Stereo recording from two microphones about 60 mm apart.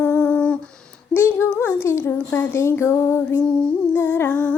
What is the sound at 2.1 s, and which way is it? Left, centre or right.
Female singing, left.